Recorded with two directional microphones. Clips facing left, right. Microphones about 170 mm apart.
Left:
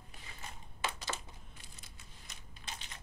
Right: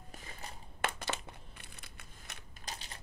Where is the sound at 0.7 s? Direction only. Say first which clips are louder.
Right 3 dB; 60° right (ahead or behind).